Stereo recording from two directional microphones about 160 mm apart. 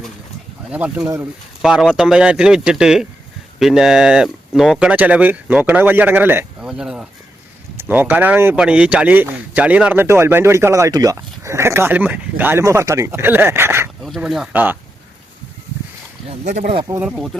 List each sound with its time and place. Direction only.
0.7 s speech: 10° right (ahead or behind)
1.0 s speech: 20° right (ahead or behind)
1.6 s speech: centre (ahead or behind)
14.0 s speech: centre (ahead or behind)
16.2 s speech: 40° right (ahead or behind)
17.0 s speech: 5° right (ahead or behind)